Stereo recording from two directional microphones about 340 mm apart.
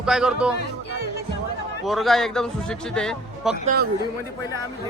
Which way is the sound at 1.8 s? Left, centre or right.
Centre.